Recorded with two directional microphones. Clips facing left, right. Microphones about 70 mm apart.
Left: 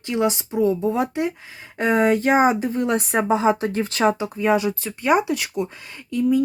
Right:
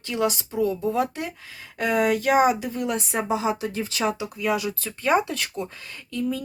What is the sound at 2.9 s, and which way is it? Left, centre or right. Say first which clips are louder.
Speech: left 5 dB; left.